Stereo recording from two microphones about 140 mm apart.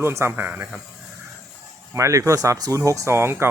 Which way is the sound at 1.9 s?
20° right (ahead or behind).